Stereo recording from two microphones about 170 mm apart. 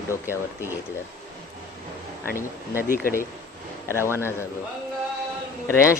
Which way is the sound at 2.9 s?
60° left (ahead or behind).